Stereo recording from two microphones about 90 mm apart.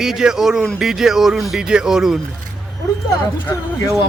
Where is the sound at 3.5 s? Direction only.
30° left (ahead or behind).